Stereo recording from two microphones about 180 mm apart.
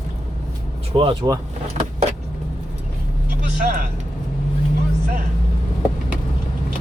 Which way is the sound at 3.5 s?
50° right (ahead or behind).